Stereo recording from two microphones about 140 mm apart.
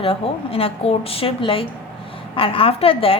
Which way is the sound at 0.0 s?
40° left (ahead or behind).